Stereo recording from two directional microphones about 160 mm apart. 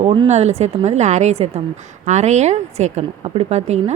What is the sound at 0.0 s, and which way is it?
A woman's voice, 40° right (ahead or behind).